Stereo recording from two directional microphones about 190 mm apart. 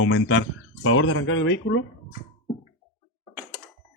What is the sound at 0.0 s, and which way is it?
Speech, 90° left.